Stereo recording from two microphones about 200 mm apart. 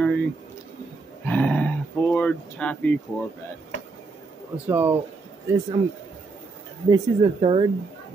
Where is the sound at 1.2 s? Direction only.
10° left (ahead or behind).